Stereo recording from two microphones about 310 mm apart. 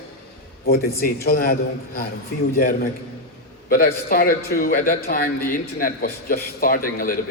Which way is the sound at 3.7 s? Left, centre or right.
Left.